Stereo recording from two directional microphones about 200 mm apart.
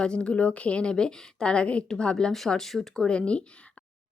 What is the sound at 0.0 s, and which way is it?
A woman's voice, 5° left (ahead or behind).